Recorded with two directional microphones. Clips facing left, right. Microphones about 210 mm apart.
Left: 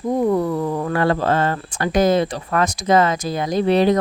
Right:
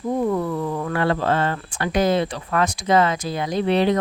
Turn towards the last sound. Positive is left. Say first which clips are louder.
# left 3 dB
turn(degrees=40)  # may be behind; listen again after turning